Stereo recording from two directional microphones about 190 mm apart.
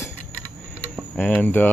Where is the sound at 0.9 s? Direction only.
5° left (ahead or behind).